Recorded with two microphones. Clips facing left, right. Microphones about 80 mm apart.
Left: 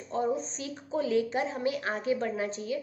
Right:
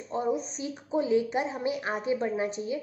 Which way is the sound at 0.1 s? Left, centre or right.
Centre.